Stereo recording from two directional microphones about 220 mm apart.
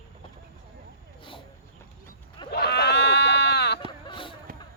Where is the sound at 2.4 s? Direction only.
50° left (ahead or behind).